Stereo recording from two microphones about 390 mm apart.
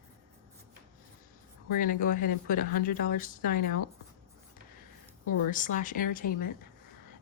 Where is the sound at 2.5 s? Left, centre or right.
Left.